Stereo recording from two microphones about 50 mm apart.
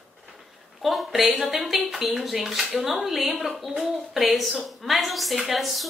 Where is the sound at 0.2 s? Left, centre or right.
Centre.